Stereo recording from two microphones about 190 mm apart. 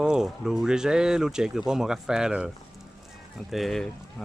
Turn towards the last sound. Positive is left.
turn(degrees=0)  # may be behind; listen again after turning